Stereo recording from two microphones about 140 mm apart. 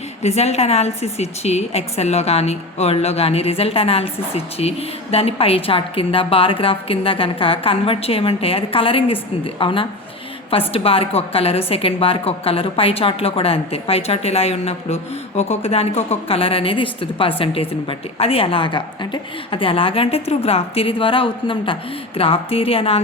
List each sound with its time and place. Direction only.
0.2 s a woman's voice: 50° left (ahead or behind)